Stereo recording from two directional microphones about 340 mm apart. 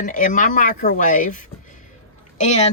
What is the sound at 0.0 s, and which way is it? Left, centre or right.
Speech, left.